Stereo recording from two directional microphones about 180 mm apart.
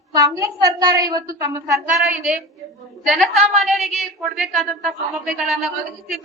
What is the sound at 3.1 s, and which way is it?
A woman's voice, centre (ahead or behind).